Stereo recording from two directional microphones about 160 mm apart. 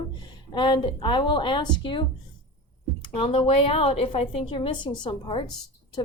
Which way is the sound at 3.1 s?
35° left (ahead or behind).